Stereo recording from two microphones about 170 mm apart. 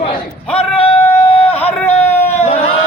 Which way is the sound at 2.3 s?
40° left (ahead or behind).